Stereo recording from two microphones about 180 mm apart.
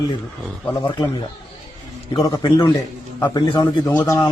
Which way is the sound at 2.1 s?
20° left (ahead or behind).